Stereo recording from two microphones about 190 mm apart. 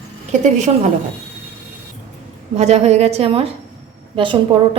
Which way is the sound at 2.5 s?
35° right (ahead or behind).